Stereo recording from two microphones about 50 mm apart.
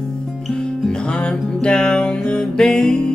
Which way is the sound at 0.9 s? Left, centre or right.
Centre.